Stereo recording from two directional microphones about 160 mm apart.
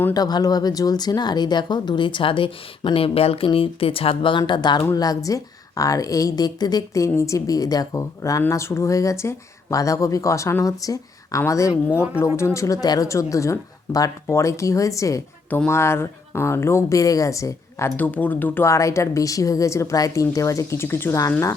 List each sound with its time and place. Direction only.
0.1 s speech: 25° left (ahead or behind)